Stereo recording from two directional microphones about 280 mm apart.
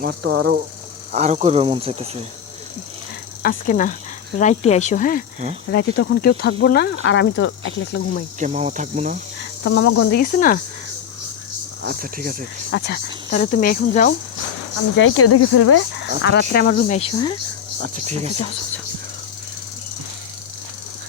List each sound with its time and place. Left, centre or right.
0.0 s speech: right
1.1 s speech: right
3.4 s speech: left
8.4 s speech: right
9.6 s speech: left
10.1 s speech: left
11.8 s speech: right
12.7 s speech: left
14.9 s speech: left
16.2 s speech: left; by 17.3 s centre
17.7 s speech: right